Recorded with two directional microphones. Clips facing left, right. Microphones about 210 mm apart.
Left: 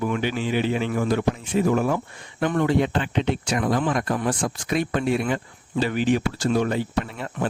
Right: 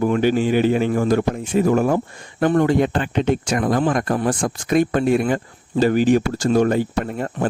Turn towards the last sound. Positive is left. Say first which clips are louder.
# right 4 dB
turn(degrees=-45)  # may be behind; listen again after turning